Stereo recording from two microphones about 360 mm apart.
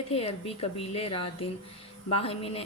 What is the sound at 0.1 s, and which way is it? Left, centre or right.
A woman's voice, centre.